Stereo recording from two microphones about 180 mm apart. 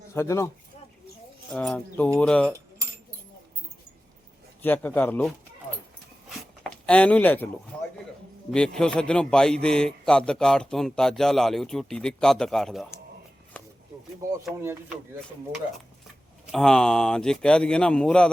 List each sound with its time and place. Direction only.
0.1 s speech: 15° left (ahead or behind)
1.5 s a man's voice: 5° left (ahead or behind)
4.6 s speech: 10° left (ahead or behind)
6.2 s a sound: 5° left (ahead or behind)
8.4 s a man's voice: 5° left (ahead or behind)
13.5 s a sound: 10° left (ahead or behind)
14.5 s speech: 15° right (ahead or behind)
16.5 s a man's voice: 5° left (ahead or behind)